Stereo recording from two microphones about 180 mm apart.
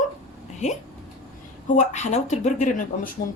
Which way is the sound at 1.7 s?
40° left (ahead or behind).